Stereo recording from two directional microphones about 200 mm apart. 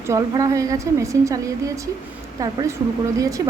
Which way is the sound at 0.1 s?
15° right (ahead or behind).